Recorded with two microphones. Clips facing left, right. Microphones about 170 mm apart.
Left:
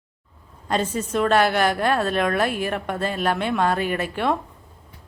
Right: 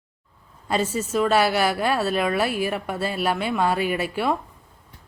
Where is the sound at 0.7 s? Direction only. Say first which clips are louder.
Even; 5° right (ahead or behind).